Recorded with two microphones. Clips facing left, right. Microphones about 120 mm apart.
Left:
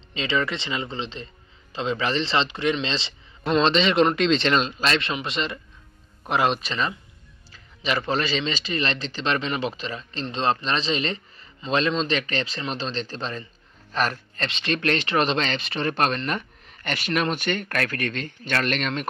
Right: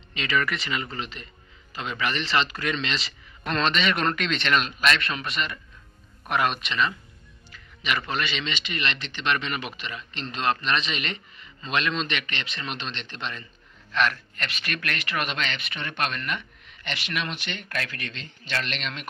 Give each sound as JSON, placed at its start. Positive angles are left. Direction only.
{"t": 0.1, "sound": "a man's voice", "side_deg": 25}